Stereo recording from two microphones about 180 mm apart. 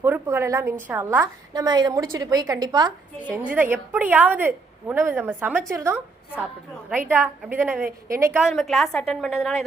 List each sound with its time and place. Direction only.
0.0 s a woman's voice: 10° right (ahead or behind)
1.5 s a woman's voice: 20° right (ahead or behind)
3.3 s a woman's voice: 10° right (ahead or behind)
7.1 s a woman's voice: 10° right (ahead or behind)
7.9 s a woman's voice: 50° right (ahead or behind)
8.4 s a woman's voice: centre (ahead or behind)